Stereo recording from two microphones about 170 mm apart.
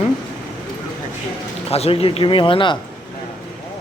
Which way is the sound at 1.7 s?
35° left (ahead or behind).